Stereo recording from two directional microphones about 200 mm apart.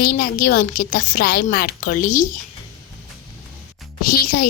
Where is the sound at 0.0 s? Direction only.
45° left (ahead or behind).